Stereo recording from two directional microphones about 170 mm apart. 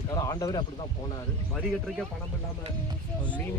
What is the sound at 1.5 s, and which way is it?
Speech, centre (ahead or behind).